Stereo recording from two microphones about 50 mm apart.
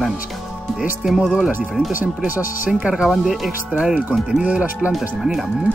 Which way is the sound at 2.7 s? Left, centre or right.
Centre.